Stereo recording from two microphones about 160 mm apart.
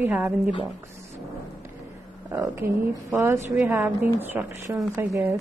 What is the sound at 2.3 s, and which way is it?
A woman's voice, 15° right (ahead or behind).